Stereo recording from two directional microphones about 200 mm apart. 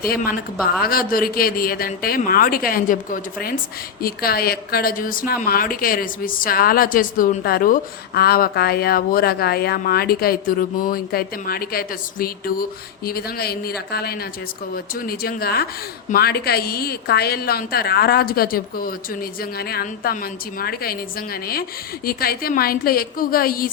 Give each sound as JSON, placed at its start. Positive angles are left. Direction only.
{"t": 0.6, "sound": "a woman's voice", "side_deg": 45}